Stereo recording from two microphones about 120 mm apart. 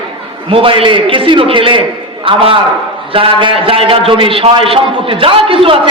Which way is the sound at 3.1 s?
50° right (ahead or behind).